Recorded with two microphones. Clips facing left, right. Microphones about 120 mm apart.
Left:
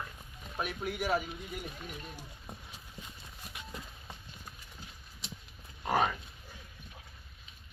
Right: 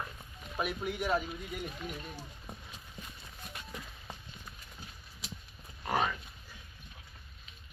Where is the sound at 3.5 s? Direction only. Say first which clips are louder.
Even; 10° left (ahead or behind).